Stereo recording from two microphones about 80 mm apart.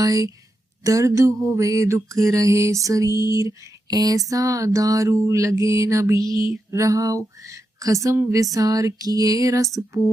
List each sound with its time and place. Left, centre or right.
0.0 s mantra: right